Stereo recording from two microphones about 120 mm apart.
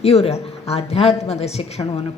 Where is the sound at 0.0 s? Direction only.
60° left (ahead or behind).